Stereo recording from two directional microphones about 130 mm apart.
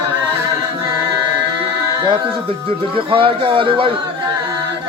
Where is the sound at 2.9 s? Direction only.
45° right (ahead or behind).